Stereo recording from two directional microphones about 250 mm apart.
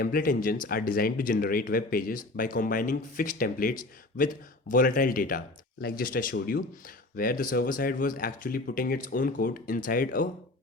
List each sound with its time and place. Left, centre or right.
0.0 s speech: left